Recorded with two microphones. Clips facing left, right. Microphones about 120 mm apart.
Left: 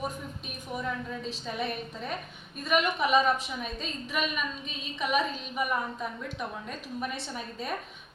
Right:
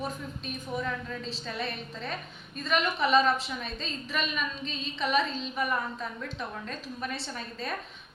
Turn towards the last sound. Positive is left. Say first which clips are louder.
# left 1 dB
turn(degrees=15)  # may be behind; listen again after turning